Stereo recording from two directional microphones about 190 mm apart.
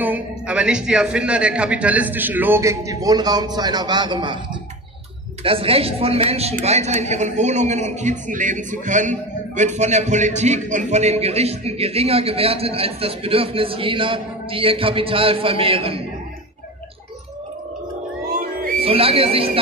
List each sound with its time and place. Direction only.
0.0 s a man's voice: 5° right (ahead or behind); by 4.4 s 25° right (ahead or behind)
5.4 s a woman's voice: 30° right (ahead or behind)
18.8 s speech: 30° right (ahead or behind)